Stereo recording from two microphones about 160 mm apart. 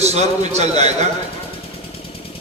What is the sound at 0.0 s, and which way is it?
Speech, 45° right (ahead or behind).